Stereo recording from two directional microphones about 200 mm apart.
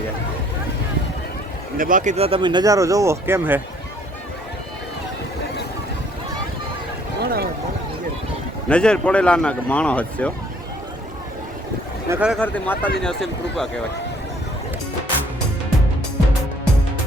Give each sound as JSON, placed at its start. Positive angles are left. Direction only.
{"t": 1.8, "sound": "speech", "side_deg": -40}
{"t": 7.2, "sound": "a sound", "side_deg": -50}
{"t": 8.7, "sound": "speech", "side_deg": 5}
{"t": 12.0, "sound": "speech", "side_deg": -10}
{"t": 12.4, "sound": "speech", "side_deg": 10}